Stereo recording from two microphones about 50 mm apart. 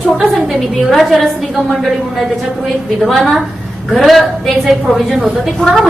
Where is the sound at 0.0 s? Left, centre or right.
Centre.